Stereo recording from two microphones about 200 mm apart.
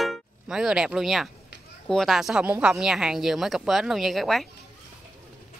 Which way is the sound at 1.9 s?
Centre (ahead or behind).